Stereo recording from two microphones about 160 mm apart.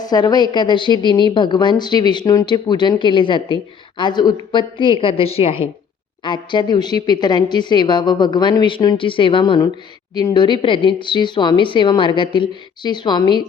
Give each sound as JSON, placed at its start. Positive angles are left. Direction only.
{"t": 0.0, "sound": "a woman's voice", "side_deg": 25}